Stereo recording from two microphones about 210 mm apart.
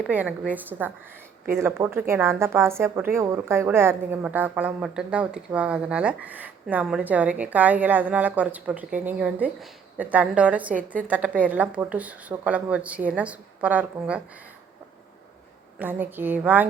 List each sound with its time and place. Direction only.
0.1 s a woman's voice: 5° right (ahead or behind)
15.8 s a woman's voice: 10° right (ahead or behind)